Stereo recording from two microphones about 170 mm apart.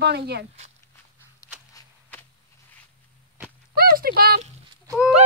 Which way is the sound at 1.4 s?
20° left (ahead or behind).